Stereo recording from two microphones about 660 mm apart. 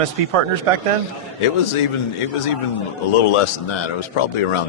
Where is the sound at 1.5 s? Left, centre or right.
Left.